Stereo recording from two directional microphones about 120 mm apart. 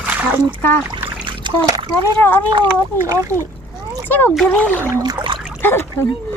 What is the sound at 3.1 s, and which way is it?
Speech, 25° right (ahead or behind).